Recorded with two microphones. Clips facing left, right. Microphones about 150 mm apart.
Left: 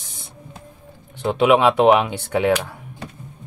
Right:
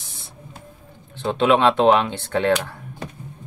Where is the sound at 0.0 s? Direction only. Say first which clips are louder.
Left 1 dB; 20° left (ahead or behind).